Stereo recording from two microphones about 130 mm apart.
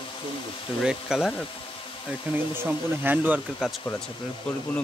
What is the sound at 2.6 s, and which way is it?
Speech, 15° right (ahead or behind).